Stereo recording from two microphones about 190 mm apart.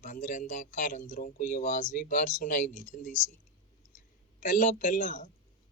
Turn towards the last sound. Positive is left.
turn(degrees=40)  # may be behind; listen again after turning